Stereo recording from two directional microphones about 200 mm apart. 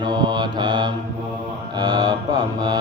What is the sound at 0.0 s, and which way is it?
Mantra, 20° right (ahead or behind).